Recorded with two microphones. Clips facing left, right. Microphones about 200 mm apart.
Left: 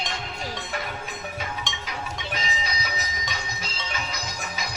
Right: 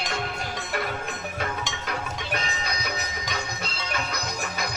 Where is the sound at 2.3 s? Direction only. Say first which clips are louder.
Right 1 dB; 60° right (ahead or behind).